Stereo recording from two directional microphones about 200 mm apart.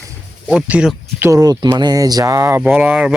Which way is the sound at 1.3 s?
20° right (ahead or behind).